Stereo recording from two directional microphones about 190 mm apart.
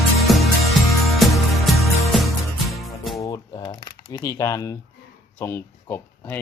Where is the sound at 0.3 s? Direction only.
Centre (ahead or behind).